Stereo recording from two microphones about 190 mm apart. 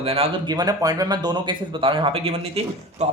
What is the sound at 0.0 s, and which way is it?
Speech, 30° right (ahead or behind).